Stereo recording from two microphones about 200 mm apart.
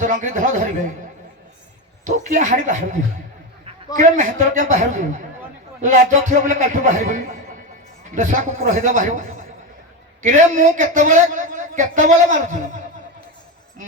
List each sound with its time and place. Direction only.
0.0 s a man's voice: 40° right (ahead or behind)
2.0 s a man's voice: 40° right (ahead or behind)
3.9 s a man's voice: 40° right (ahead or behind)
10.2 s a man's voice: 40° right (ahead or behind)